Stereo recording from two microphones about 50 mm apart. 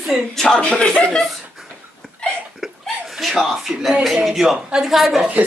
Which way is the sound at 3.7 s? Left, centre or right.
Centre.